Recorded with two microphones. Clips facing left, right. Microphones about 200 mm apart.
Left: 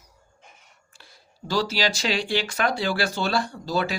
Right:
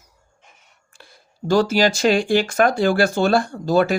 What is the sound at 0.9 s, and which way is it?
Speech, 50° right (ahead or behind).